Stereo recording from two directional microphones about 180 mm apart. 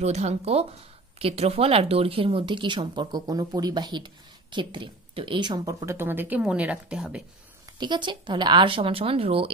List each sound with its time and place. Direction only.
0.0 s speech: 35° right (ahead or behind); by 7.2 s 5° right (ahead or behind)
7.8 s speech: 25° right (ahead or behind)